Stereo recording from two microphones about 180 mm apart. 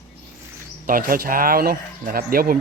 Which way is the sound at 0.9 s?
50° right (ahead or behind).